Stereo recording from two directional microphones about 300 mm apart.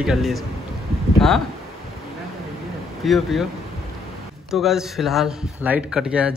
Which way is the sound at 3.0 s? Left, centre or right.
Centre.